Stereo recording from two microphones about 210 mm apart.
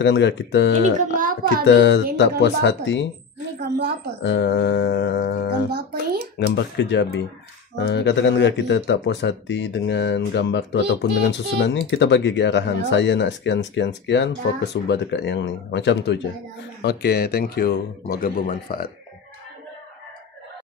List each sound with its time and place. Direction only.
0.0 s speech: 60° left (ahead or behind)
0.9 s music: 40° right (ahead or behind)
1.7 s speech: 60° left (ahead or behind)
3.5 s a woman's voice: 50° right (ahead or behind)
4.2 s speech: 60° left (ahead or behind)
5.7 s music: 50° right (ahead or behind)
6.3 s speech: 55° left (ahead or behind)